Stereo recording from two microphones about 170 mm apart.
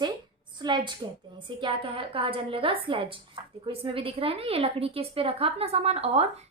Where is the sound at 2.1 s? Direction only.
30° right (ahead or behind).